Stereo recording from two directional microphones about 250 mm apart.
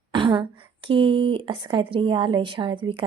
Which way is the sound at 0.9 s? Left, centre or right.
Right.